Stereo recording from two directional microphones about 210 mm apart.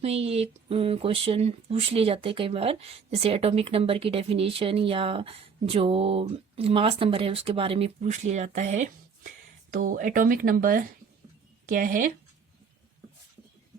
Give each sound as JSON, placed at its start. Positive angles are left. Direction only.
{"t": 0.0, "sound": "speech", "side_deg": -30}